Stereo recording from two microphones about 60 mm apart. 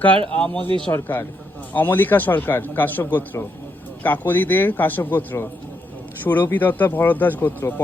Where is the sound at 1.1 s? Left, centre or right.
Left.